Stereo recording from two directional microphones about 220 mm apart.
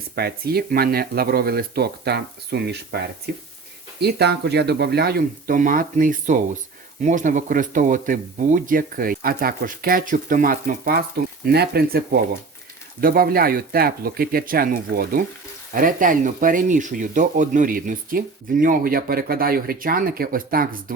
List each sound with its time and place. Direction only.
0.2 s speech: 45° right (ahead or behind)